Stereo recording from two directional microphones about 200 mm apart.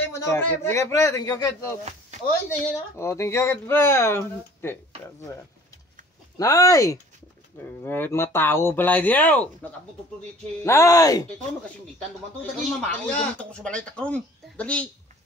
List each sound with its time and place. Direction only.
0.1 s speech: 15° left (ahead or behind)
1.9 s speech: 35° right (ahead or behind)
2.6 s speech: 15° left (ahead or behind)
6.3 s speech: 15° left (ahead or behind)
12.4 s speech: 5° left (ahead or behind)